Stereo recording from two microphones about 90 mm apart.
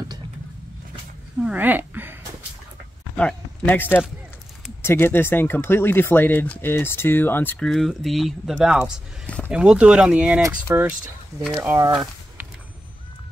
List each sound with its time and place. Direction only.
1.4 s speech: 20° right (ahead or behind)
3.2 s speech: 15° left (ahead or behind)
7.6 s speech: 5° left (ahead or behind)
9.2 s a sound: 15° left (ahead or behind)
9.5 s speech: 10° right (ahead or behind)
11.3 s speech: 35° right (ahead or behind)